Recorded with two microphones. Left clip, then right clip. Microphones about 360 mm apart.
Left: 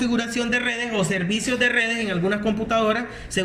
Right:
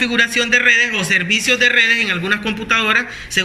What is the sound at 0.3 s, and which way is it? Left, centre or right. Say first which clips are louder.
A man's voice: right 10 dB; centre.